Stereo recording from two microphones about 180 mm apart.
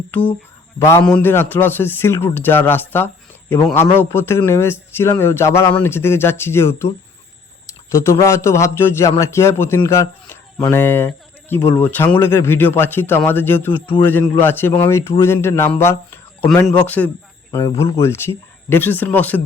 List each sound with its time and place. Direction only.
0.1 s a man's voice: 10° left (ahead or behind)
7.9 s a man's voice: 15° left (ahead or behind)